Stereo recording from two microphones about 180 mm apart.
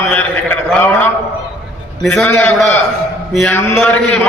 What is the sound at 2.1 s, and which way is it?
Speech, 10° left (ahead or behind).